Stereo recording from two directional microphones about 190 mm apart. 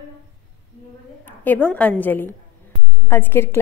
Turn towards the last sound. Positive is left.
turn(degrees=10)  # may be behind; listen again after turning